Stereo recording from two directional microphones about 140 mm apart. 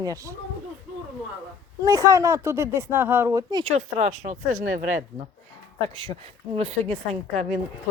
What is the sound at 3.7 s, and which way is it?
Speech, 65° right (ahead or behind).